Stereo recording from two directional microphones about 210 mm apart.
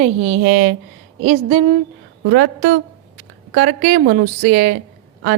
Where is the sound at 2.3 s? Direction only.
50° right (ahead or behind).